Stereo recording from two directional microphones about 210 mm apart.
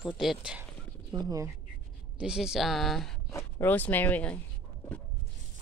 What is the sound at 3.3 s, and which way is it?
Speech, 10° left (ahead or behind).